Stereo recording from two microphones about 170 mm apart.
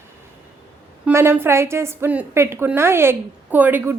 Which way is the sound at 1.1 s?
15° right (ahead or behind).